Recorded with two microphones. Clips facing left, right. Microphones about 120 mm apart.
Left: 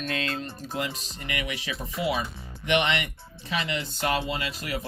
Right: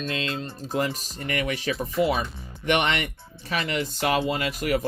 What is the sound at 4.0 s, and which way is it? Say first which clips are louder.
Speech: right 3 dB; 50° right (ahead or behind).